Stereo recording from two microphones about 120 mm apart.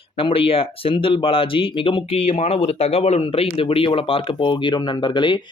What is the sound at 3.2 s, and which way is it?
Speech, 50° left (ahead or behind).